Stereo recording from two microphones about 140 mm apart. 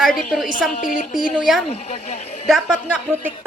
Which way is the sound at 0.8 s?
75° left (ahead or behind).